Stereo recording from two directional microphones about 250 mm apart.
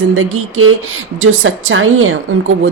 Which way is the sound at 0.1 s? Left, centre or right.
Right.